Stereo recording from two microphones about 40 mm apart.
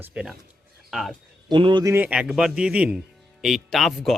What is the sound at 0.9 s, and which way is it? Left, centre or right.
Speech, centre.